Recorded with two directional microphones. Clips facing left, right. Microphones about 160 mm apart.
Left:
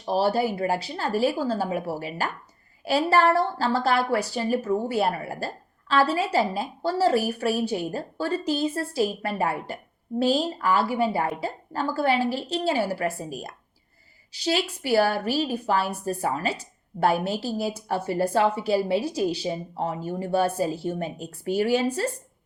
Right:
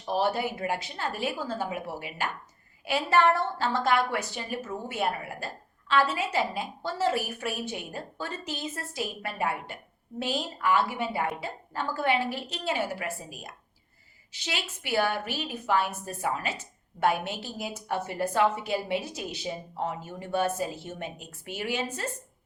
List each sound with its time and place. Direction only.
0.1 s a woman's voice: 30° left (ahead or behind)